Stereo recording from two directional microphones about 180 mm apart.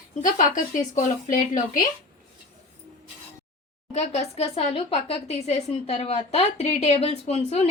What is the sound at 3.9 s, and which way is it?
Speech, 35° left (ahead or behind).